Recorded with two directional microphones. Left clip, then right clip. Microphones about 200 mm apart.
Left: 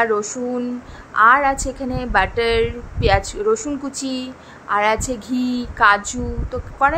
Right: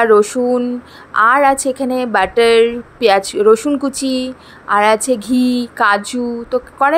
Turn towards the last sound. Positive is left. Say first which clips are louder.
# right 4 dB
turn(degrees=-30)  # may be behind; listen again after turning